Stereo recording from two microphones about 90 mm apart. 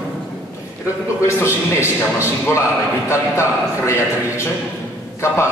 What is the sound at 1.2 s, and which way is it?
A man's voice, 30° left (ahead or behind).